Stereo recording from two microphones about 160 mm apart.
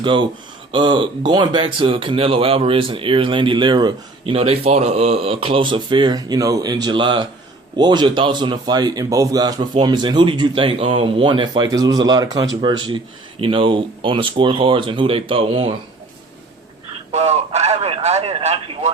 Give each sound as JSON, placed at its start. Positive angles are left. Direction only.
{"t": 0.0, "sound": "speech", "side_deg": -30}
{"t": 17.1, "sound": "speech", "side_deg": -40}